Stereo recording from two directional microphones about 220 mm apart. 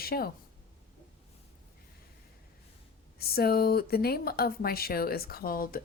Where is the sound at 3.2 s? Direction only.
45° left (ahead or behind).